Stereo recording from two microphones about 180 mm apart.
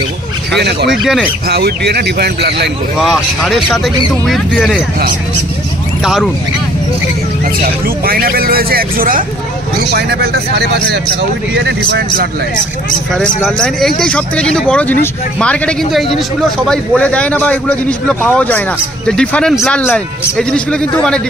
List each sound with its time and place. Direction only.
0.6 s speech: 70° right (ahead or behind)
0.8 s speech: centre (ahead or behind)
1.5 s speech: 65° right (ahead or behind)
3.0 s speech: centre (ahead or behind)
6.0 s speech: centre (ahead or behind)
8.0 s speech: 55° right (ahead or behind)
9.8 s speech: 65° right (ahead or behind)
11.5 s speech: 75° right (ahead or behind)
13.4 s a man's voice: centre (ahead or behind)